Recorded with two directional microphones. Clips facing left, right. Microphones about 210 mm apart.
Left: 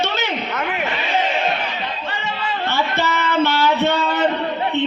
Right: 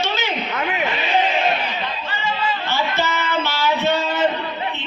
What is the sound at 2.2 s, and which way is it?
Music, 60° left (ahead or behind).